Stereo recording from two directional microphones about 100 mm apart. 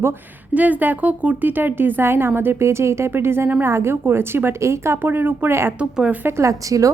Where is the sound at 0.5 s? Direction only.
15° right (ahead or behind).